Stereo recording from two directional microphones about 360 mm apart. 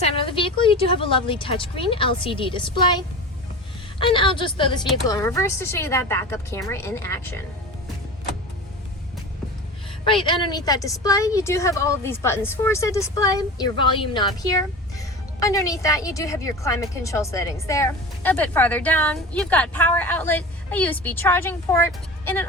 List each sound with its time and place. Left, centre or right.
0.0 s a woman's voice: centre
4.0 s a woman's voice: centre
10.1 s a woman's voice: centre